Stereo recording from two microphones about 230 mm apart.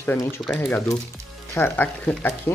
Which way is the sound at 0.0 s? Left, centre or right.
Centre.